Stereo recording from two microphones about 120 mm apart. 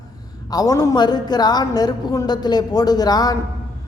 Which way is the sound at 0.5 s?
30° left (ahead or behind).